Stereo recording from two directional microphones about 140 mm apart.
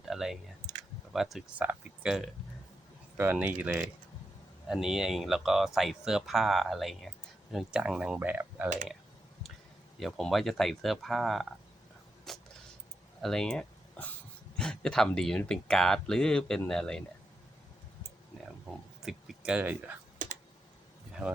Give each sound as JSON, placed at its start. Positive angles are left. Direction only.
{"t": 0.1, "sound": "computer keyboard", "side_deg": -5}
{"t": 1.1, "sound": "speech", "side_deg": 0}
{"t": 10.0, "sound": "speech", "side_deg": 5}
{"t": 12.3, "sound": "a sound", "side_deg": 0}
{"t": 13.2, "sound": "speech", "side_deg": 5}
{"t": 19.0, "sound": "speech", "side_deg": -5}
{"t": 20.2, "sound": "computer keyboard", "side_deg": -65}